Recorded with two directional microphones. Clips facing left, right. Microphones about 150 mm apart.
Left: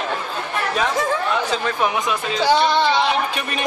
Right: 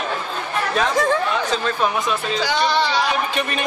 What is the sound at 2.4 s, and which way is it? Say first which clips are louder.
Speech: left 5 dB; 20° left (ahead or behind).